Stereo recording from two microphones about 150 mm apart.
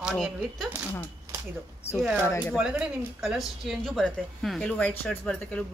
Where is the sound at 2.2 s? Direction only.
15° left (ahead or behind).